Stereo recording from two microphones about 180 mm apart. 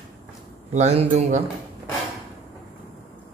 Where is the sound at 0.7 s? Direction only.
40° right (ahead or behind).